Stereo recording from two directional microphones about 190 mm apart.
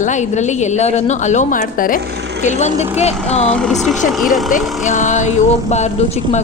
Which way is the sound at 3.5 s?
5° left (ahead or behind).